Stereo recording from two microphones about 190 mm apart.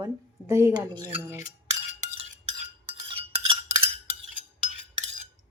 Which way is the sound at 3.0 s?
30° right (ahead or behind).